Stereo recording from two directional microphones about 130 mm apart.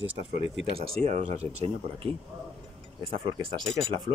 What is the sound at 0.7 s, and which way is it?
Speech, 50° right (ahead or behind).